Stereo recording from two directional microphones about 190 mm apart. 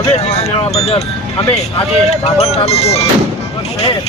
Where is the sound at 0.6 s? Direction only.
35° left (ahead or behind).